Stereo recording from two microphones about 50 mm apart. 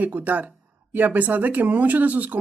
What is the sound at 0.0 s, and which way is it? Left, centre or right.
Speech, right.